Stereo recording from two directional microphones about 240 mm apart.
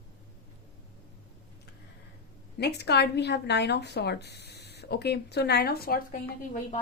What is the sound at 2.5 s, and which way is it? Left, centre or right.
A woman's voice, left.